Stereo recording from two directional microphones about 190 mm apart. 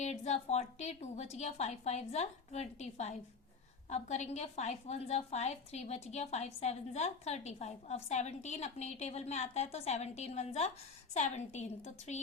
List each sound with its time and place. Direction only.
0.0 s a woman's voice: 35° left (ahead or behind)